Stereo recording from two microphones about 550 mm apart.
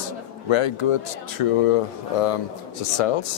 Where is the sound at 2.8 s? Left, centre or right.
Left.